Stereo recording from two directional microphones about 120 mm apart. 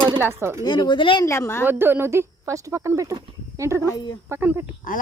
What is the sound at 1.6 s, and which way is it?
Speech, 20° right (ahead or behind).